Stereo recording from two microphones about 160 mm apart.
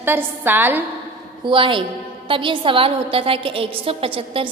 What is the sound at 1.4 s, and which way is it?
A woman's voice, 30° right (ahead or behind).